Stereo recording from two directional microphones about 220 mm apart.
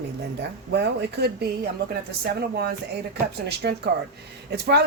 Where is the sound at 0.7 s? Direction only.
50° right (ahead or behind).